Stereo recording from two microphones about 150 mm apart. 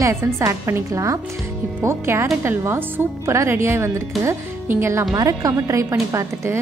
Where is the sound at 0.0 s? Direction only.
20° right (ahead or behind).